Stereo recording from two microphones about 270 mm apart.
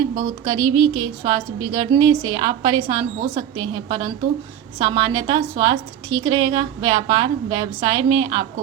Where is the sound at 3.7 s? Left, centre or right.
Centre.